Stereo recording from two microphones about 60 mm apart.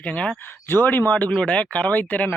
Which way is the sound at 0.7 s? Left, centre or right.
Left.